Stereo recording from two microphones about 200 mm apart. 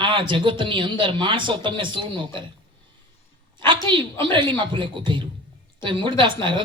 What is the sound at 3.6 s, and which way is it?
Speech, 25° right (ahead or behind).